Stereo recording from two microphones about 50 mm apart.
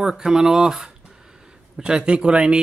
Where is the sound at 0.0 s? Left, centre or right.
Centre.